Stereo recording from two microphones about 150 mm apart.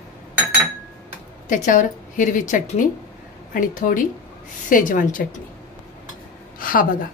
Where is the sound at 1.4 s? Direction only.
60° left (ahead or behind).